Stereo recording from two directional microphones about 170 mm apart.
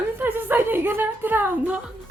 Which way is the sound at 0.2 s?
10° right (ahead or behind).